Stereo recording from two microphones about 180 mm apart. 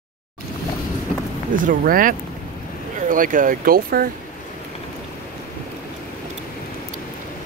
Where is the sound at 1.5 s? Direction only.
50° right (ahead or behind).